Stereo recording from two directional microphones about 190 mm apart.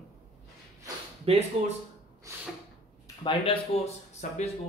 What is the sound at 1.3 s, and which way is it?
Speech, 30° right (ahead or behind).